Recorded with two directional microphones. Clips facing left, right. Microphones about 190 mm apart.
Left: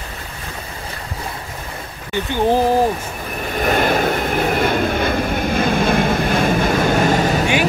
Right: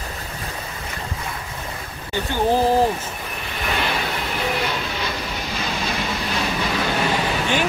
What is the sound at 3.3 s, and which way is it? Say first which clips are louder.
Vehicle: left 9 dB; 45° left (ahead or behind).